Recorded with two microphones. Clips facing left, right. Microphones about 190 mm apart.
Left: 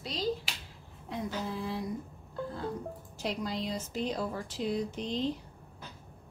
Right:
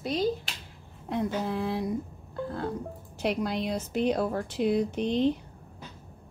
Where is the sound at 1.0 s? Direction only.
60° right (ahead or behind).